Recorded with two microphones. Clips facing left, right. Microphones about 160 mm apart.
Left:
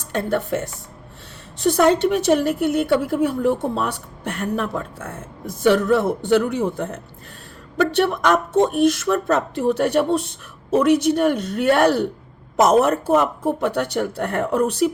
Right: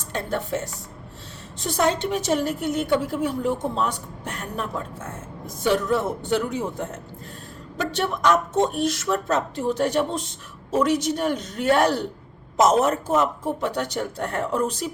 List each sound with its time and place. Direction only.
0.1 s a woman's voice: 60° left (ahead or behind)
1.6 s a woman's voice: 60° left (ahead or behind)